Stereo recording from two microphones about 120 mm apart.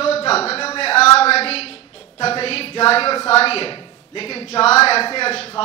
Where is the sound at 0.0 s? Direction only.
55° left (ahead or behind).